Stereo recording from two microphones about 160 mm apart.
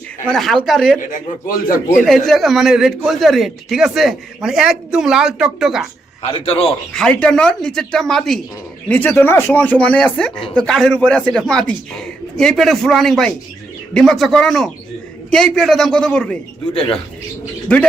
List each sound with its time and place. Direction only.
0.3 s a man's voice: centre (ahead or behind)
2.0 s a man's voice: centre (ahead or behind)
6.3 s a man's voice: 35° left (ahead or behind)
6.9 s a man's voice: 5° left (ahead or behind)
17.7 s speech: 5° left (ahead or behind)